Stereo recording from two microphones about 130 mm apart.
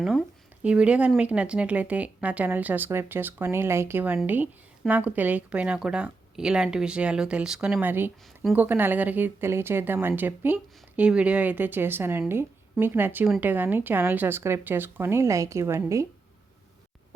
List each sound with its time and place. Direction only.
0.0 s speech: centre (ahead or behind); by 16.0 s 25° right (ahead or behind)